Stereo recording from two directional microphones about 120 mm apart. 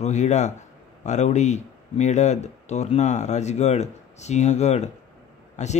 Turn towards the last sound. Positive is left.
turn(degrees=75)  # may be behind; listen again after turning